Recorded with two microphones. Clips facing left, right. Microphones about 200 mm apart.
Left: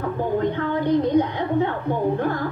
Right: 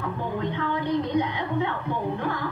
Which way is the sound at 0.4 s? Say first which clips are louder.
Left 5 dB; 45° left (ahead or behind).